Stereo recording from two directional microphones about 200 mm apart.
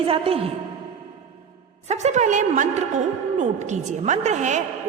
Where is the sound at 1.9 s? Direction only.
35° right (ahead or behind).